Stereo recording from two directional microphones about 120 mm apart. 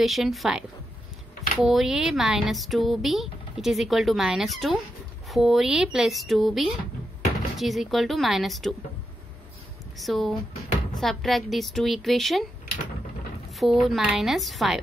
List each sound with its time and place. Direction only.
0.0 s speech: centre (ahead or behind)
9.9 s speech: centre (ahead or behind)
13.6 s speech: centre (ahead or behind)